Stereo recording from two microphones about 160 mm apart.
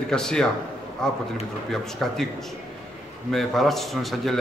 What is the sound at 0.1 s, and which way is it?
A man's voice, 5° left (ahead or behind).